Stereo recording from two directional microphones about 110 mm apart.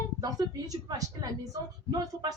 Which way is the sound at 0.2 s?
35° right (ahead or behind).